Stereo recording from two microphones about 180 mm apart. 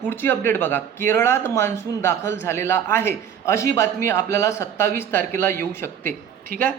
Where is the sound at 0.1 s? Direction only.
10° left (ahead or behind).